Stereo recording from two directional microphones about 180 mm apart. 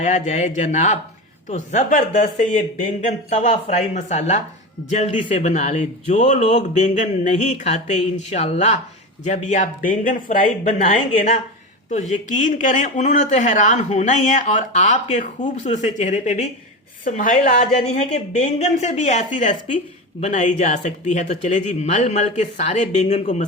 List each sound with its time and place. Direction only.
0.0 s speech: 40° left (ahead or behind)
10.7 s speech: 40° left (ahead or behind)